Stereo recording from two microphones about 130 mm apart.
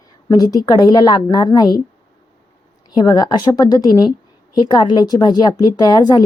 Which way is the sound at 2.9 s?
30° left (ahead or behind).